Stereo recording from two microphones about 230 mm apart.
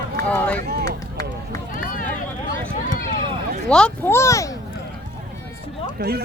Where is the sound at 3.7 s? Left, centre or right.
Centre.